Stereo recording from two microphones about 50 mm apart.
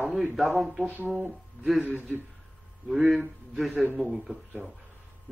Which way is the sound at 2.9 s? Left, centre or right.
Centre.